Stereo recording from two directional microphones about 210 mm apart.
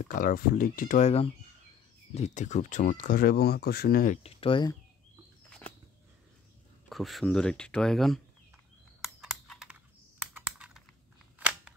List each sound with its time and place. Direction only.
0.0 s speech: 40° left (ahead or behind); by 4.7 s 25° left (ahead or behind)
6.9 s speech: centre (ahead or behind)
9.0 s computer keyboard: centre (ahead or behind)
11.3 s a sound: 5° right (ahead or behind)